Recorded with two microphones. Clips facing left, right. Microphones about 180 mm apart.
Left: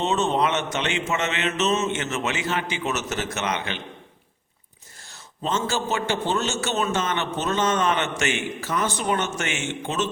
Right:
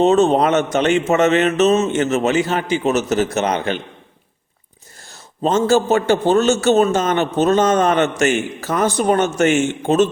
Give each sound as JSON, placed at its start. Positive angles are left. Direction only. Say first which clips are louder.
{"t": 0.0, "sound": "a man's voice", "louder": "right 9 dB", "side_deg": -40}
{"t": 5.1, "sound": "a man's voice", "louder": "right 9 dB", "side_deg": -40}